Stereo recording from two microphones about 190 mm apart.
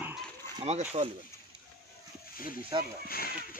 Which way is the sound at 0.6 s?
35° right (ahead or behind).